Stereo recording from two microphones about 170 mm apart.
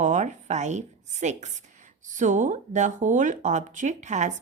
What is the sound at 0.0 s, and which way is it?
A woman's voice, 45° right (ahead or behind).